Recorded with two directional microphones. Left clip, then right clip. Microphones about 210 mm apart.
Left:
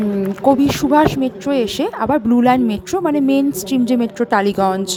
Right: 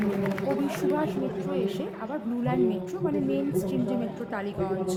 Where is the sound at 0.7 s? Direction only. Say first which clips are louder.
Left 14 dB; 50° left (ahead or behind).